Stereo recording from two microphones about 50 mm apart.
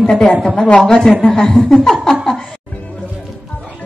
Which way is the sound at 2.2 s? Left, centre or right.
Centre.